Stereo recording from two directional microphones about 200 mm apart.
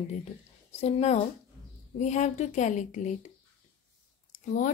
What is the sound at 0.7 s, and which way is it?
A woman's voice, 35° left (ahead or behind).